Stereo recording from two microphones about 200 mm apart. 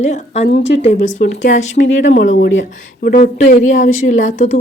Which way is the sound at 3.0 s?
40° left (ahead or behind).